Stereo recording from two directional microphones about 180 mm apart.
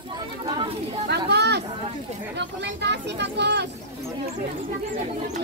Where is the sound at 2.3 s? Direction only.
75° right (ahead or behind).